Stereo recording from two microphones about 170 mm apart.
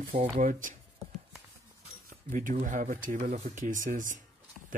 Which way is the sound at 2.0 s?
50° right (ahead or behind).